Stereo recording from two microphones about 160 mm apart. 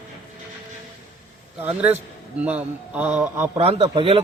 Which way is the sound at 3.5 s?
40° right (ahead or behind).